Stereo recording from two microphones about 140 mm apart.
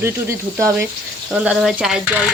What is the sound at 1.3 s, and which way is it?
Speech, 5° right (ahead or behind).